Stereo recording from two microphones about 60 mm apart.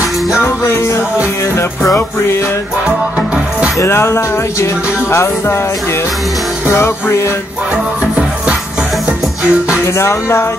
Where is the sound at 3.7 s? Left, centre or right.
Left.